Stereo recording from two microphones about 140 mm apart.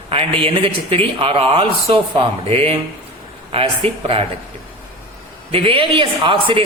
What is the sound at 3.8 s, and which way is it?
Speech, 45° right (ahead or behind).